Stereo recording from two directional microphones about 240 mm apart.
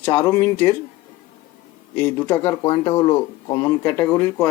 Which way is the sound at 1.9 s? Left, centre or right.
Centre.